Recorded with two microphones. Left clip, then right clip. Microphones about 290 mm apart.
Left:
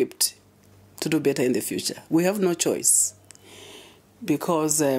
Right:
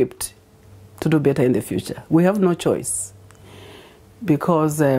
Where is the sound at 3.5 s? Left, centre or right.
Right.